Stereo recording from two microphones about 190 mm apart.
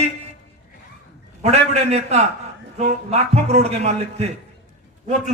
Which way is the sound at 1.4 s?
35° right (ahead or behind).